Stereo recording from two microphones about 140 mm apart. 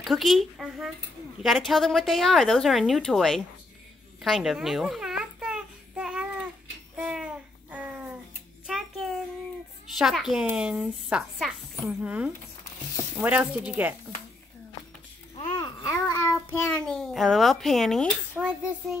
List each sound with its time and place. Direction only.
0.0 s a woman's voice: centre (ahead or behind)
4.2 s babbling: centre (ahead or behind)
8.6 s a sound: centre (ahead or behind)
9.9 s a woman's voice: centre (ahead or behind)
15.3 s babbling: 35° left (ahead or behind)
16.1 s child singing: 20° left (ahead or behind)
16.7 s a woman's voice: 5° left (ahead or behind)